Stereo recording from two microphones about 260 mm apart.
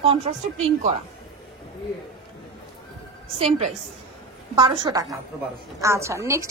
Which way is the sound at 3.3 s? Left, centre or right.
Right.